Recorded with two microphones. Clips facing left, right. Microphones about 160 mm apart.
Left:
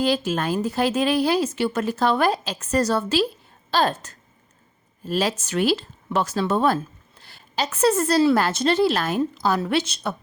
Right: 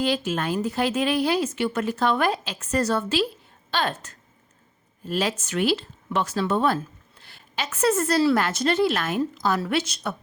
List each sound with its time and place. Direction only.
0.0 s a woman's voice: 40° left (ahead or behind)